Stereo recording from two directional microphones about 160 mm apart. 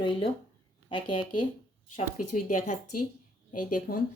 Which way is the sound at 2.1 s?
55° left (ahead or behind).